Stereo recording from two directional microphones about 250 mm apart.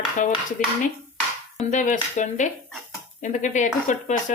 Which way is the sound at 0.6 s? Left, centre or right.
Left.